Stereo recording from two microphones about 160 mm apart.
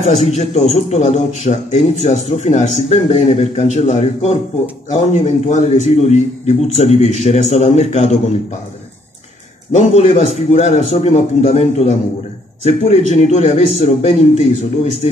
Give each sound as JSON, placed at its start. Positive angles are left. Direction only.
{"t": 0.0, "sound": "a man's voice", "side_deg": 45}
{"t": 9.7, "sound": "a man's voice", "side_deg": 45}